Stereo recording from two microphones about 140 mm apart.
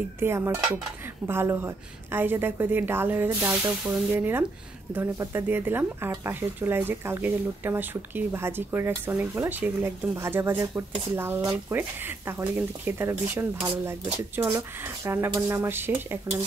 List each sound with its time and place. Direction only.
0.2 s speech: 15° right (ahead or behind)